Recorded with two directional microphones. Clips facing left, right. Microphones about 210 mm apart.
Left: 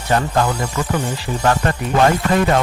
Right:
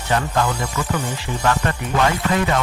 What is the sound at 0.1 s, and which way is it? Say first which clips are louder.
Speech: left 3 dB; 35° left (ahead or behind).